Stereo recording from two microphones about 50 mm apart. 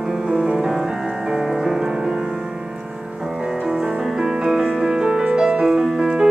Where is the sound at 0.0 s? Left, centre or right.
Centre.